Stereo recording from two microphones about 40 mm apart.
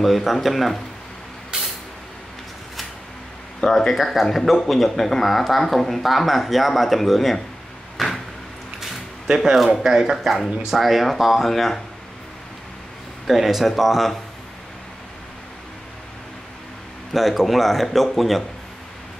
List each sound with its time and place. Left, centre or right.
0.0 s speech: centre
1.5 s vehicle: centre
3.6 s speech: centre
8.0 s a sound: centre
9.3 s speech: centre
10.1 s speech: centre
13.3 s speech: centre
17.1 s speech: centre